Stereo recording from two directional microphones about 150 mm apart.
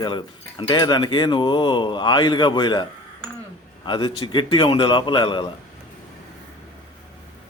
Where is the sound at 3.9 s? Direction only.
30° left (ahead or behind).